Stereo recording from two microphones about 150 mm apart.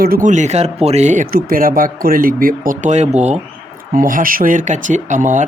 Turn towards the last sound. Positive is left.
turn(degrees=-55)  # may be behind; listen again after turning